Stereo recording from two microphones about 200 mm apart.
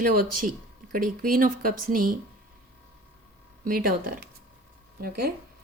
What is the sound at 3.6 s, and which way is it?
Speech, 45° right (ahead or behind).